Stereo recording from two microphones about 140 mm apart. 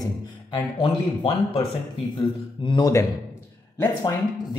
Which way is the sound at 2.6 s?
30° left (ahead or behind).